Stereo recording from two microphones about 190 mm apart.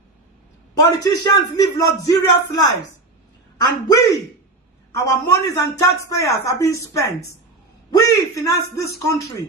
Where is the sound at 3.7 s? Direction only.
20° left (ahead or behind).